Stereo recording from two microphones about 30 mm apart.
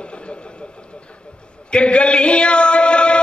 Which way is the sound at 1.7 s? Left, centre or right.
Left.